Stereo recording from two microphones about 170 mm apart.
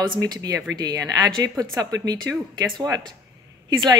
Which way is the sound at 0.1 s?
25° right (ahead or behind).